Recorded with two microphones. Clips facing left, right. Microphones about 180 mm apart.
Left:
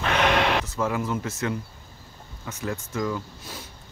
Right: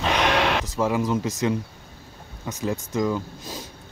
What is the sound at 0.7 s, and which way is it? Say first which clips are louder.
Speech: right 4 dB; 20° right (ahead or behind).